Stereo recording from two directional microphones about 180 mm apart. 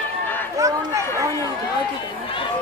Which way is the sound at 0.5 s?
15° right (ahead or behind).